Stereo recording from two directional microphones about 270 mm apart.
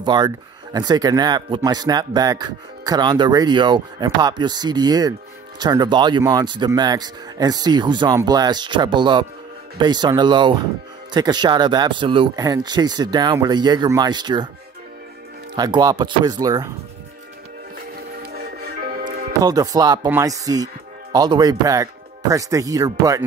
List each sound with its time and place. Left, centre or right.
0.0 s speech: centre
15.5 s speech: centre
18.2 s music: right
19.4 s speech: centre